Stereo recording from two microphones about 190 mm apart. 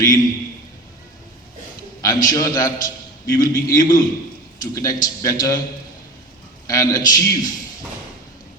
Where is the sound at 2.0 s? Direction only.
20° left (ahead or behind).